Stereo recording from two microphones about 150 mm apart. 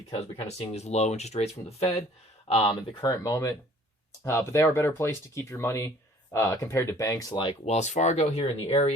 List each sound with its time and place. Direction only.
0.4 s speech: 45° left (ahead or behind); by 7.5 s 30° left (ahead or behind)
7.6 s speech: 50° left (ahead or behind)